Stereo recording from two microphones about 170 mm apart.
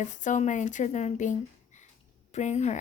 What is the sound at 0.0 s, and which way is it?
Speech, 45° left (ahead or behind).